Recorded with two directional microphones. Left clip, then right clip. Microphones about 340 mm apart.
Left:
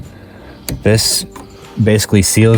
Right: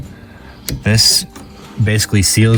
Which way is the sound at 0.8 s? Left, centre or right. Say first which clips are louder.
Right 1 dB; left.